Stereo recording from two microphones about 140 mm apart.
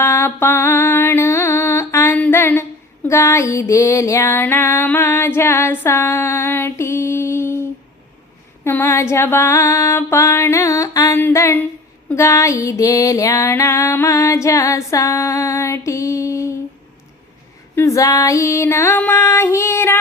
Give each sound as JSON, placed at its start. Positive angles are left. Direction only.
{"t": 0.0, "sound": "music", "side_deg": 15}
{"t": 8.6, "sound": "music", "side_deg": 20}
{"t": 17.7, "sound": "music", "side_deg": 20}